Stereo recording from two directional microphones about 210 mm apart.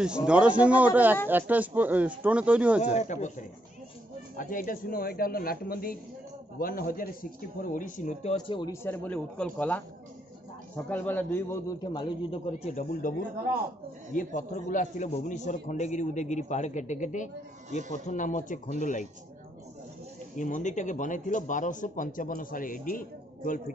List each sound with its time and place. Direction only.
0.0 s a man's voice: 5° right (ahead or behind)
2.8 s speech: 35° left (ahead or behind)
8.8 s a man's voice: 10° left (ahead or behind)
10.9 s a man's voice: 10° left (ahead or behind); by 13.1 s 35° left (ahead or behind)
14.1 s speech: 40° left (ahead or behind)
20.3 s speech: 35° left (ahead or behind)